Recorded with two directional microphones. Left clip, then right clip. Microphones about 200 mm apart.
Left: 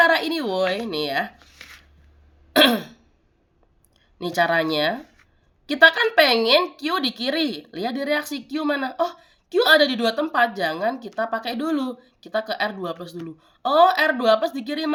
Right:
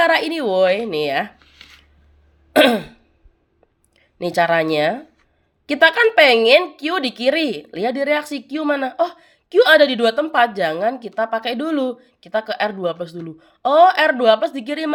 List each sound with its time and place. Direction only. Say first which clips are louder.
0.0 s speech: right 2 dB; 35° right (ahead or behind)
2.6 s throat clearing: right 3 dB; 30° right (ahead or behind)
4.2 s speech: right 4 dB; 35° right (ahead or behind)